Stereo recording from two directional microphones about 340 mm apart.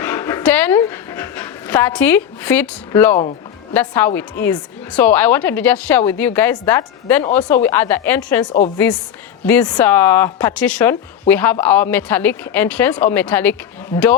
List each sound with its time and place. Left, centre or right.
0.0 s dog: centre
3.7 s speech: centre
9.5 s speech: centre